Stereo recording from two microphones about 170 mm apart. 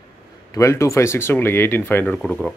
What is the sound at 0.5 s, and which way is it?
A man's voice, 20° left (ahead or behind).